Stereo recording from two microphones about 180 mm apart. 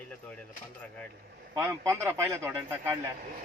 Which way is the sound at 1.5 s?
15° right (ahead or behind).